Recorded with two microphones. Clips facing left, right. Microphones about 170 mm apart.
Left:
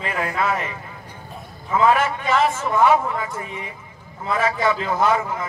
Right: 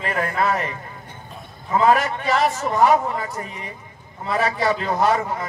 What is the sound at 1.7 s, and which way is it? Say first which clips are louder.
Speech: even; 40° right (ahead or behind).